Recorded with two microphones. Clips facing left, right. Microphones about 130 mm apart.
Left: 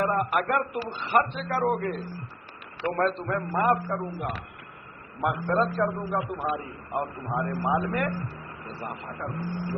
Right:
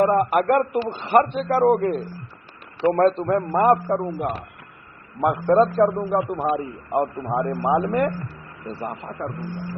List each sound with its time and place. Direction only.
0.0 s a man's voice: 35° right (ahead or behind); by 1.2 s 50° right (ahead or behind)
1.2 s a man's voice: 30° right (ahead or behind)
2.9 s a man's voice: 40° right (ahead or behind)